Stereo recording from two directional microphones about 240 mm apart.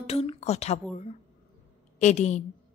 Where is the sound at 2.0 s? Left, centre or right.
Left.